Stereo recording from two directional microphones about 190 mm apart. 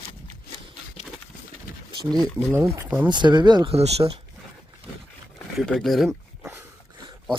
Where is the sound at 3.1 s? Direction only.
25° right (ahead or behind).